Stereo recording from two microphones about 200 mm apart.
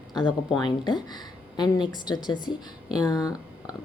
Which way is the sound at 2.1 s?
20° left (ahead or behind).